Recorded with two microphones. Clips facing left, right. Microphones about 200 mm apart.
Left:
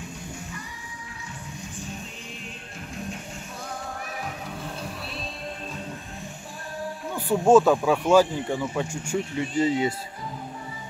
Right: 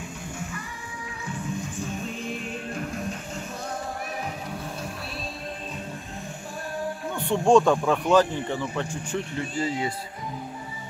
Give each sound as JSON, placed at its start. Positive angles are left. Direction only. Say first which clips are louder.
{"t": 7.2, "sound": "speech", "louder": "left 2 dB", "side_deg": 5}
{"t": 9.4, "sound": "speech", "louder": "left 6 dB", "side_deg": 20}